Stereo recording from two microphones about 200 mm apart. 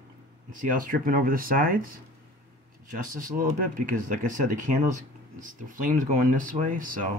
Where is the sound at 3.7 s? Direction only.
40° right (ahead or behind).